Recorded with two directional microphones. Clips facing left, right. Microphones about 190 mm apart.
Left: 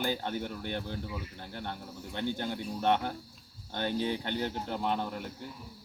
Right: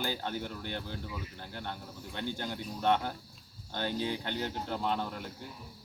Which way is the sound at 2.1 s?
15° left (ahead or behind).